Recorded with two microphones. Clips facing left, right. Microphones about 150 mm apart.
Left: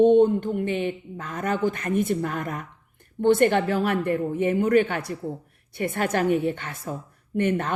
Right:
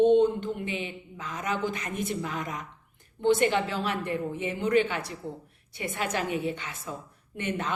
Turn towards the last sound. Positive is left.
turn(degrees=50)  # may be behind; listen again after turning